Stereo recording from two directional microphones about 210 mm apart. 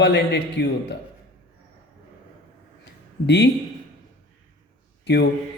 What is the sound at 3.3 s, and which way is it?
Speech, 55° left (ahead or behind).